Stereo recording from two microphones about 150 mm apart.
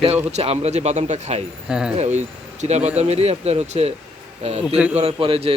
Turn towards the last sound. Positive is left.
turn(degrees=-35)  # may be behind; listen again after turning